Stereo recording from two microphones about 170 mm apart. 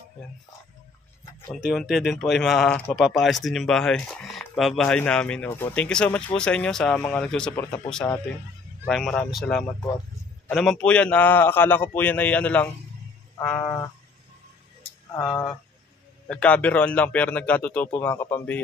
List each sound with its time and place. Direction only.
1.6 s a man's voice: 5° right (ahead or behind); by 13.8 s 15° left (ahead or behind)
15.1 s a man's voice: 15° left (ahead or behind)